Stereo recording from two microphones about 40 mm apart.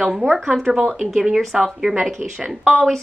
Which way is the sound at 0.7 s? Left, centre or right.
Centre.